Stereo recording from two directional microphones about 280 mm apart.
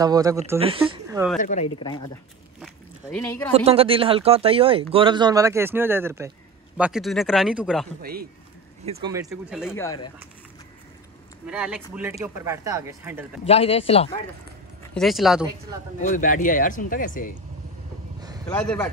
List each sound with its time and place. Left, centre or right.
0.0 s speech: centre
1.4 s speech: left
2.6 s a sound: centre
3.5 s speech: right; by 7.9 s centre
8.0 s a man's voice: right
8.8 s speech: right
9.3 s speech: centre
11.4 s speech: centre
13.4 s speech: left
15.0 s speech: centre
16.0 s speech: left
18.5 s speech: centre